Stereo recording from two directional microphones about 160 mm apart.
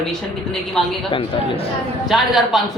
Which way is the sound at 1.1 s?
35° left (ahead or behind).